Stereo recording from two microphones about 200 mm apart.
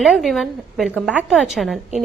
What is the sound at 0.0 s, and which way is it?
A woman's voice, centre (ahead or behind).